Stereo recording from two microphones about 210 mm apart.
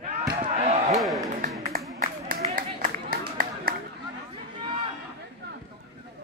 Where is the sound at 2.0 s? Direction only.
40° right (ahead or behind).